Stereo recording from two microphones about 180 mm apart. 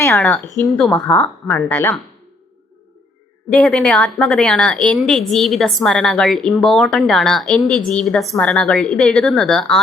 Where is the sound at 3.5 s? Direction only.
5° left (ahead or behind).